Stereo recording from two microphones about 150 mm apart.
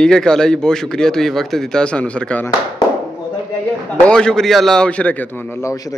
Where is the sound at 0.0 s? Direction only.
5° left (ahead or behind).